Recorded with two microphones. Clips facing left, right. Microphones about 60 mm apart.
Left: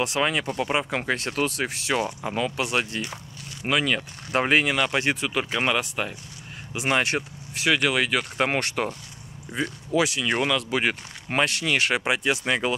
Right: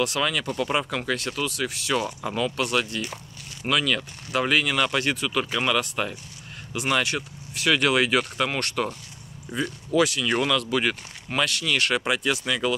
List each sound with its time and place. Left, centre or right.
0.0 s speech: left
4.3 s speech: left
4.7 s speech: centre
5.0 s speech: left
7.7 s speech: centre
8.5 s speech: left
12.4 s speech: left